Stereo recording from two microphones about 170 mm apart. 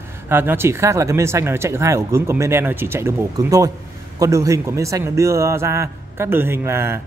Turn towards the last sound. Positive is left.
turn(degrees=-15)  # may be behind; listen again after turning